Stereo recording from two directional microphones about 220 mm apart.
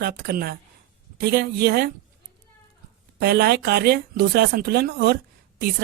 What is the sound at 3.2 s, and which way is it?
Speech, 45° right (ahead or behind).